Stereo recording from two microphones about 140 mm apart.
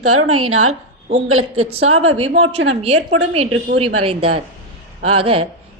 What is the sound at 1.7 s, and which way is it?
Speech, 45° right (ahead or behind).